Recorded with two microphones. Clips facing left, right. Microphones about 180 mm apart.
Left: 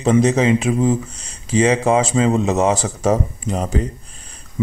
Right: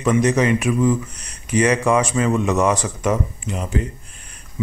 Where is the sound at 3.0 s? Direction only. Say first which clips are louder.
Left 3 dB; 35° left (ahead or behind).